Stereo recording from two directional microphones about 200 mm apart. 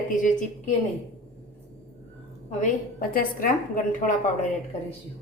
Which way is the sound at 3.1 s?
45° left (ahead or behind).